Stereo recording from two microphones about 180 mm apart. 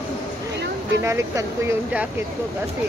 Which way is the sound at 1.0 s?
15° right (ahead or behind).